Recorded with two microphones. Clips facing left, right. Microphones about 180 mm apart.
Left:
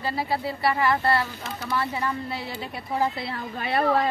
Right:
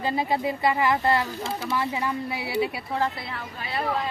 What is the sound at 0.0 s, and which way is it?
Speech, 20° right (ahead or behind).